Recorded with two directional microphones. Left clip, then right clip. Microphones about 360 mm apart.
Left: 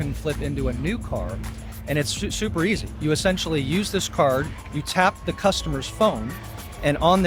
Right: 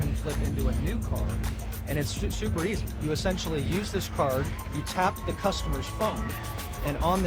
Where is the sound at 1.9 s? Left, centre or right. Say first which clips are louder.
Left 8 dB; left.